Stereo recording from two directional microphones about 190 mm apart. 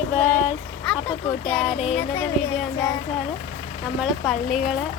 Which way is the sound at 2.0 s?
10° left (ahead or behind).